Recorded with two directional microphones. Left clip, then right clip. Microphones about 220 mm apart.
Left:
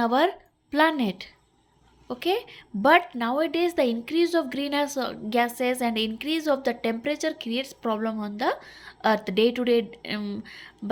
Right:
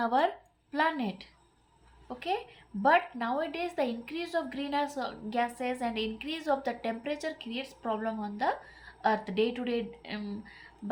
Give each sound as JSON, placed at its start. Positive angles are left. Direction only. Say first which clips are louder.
{"t": 0.0, "sound": "a woman's voice", "louder": "left 5 dB", "side_deg": 35}